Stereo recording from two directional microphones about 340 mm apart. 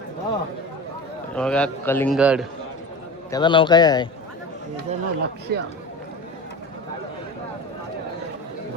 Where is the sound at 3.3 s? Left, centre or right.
Centre.